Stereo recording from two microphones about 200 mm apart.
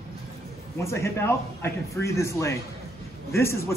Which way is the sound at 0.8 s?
15° left (ahead or behind).